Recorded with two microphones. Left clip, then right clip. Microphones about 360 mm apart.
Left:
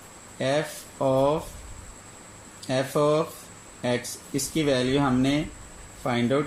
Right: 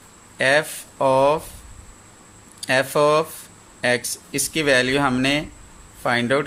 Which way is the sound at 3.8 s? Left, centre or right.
Right.